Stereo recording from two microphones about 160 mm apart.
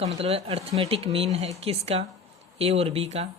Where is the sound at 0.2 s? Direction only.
35° right (ahead or behind).